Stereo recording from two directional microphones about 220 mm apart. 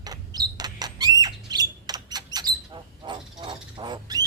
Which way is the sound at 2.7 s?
20° right (ahead or behind).